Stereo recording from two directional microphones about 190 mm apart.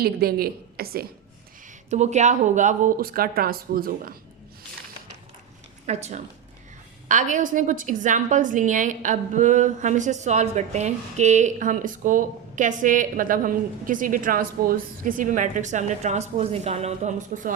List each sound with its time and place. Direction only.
0.0 s speech: 55° right (ahead or behind)
1.9 s speech: 35° right (ahead or behind)
5.8 s a woman's voice: 35° right (ahead or behind)